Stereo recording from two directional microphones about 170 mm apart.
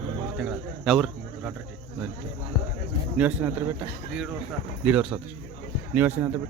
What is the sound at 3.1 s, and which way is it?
Speech, 10° right (ahead or behind).